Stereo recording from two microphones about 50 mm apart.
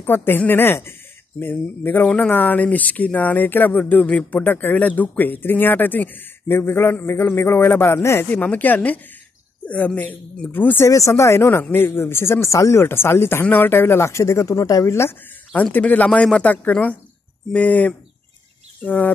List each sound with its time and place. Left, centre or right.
0.0 s a man's voice: left
2.1 s speech: left
6.5 s a man's voice: left
7.8 s speech: left
8.3 s speech: left
11.0 s speech: left
11.7 s speech: left
12.8 s speech: left
13.5 s a man's voice: left
14.0 s speech: left
15.5 s speech: left
17.5 s speech: left